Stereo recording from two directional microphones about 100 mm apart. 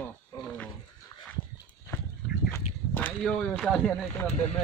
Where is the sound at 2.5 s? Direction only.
15° left (ahead or behind).